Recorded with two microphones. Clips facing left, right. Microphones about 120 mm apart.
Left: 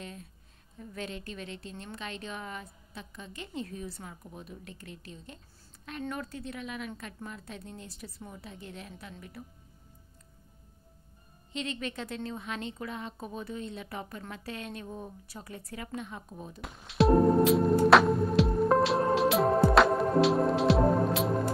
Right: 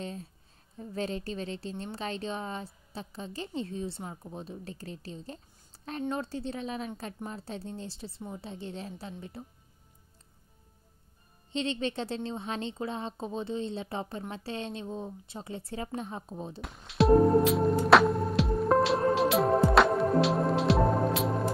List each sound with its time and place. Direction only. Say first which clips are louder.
0.0 s a sound: right 5 dB; 30° right (ahead or behind)
0.7 s a woman's voice: right 6 dB; 35° right (ahead or behind)
11.5 s a woman's voice: right 5 dB; 30° right (ahead or behind)
16.6 s music: right 1 dB; centre (ahead or behind)